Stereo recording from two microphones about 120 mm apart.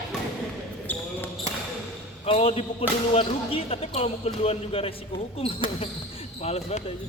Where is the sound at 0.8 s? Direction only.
15° left (ahead or behind).